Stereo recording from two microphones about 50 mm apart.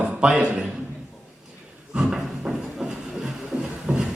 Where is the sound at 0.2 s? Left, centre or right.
Centre.